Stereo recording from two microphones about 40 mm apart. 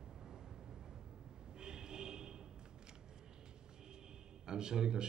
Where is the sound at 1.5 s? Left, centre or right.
Centre.